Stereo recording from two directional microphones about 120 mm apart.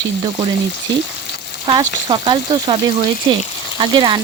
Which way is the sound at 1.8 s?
40° right (ahead or behind).